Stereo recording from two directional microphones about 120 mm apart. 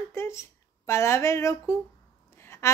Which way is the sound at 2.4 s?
20° left (ahead or behind).